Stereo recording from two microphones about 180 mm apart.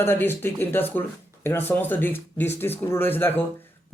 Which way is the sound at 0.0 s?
10° left (ahead or behind).